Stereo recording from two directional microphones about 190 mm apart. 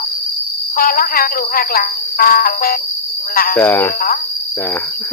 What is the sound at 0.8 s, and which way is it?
Speech, 50° left (ahead or behind).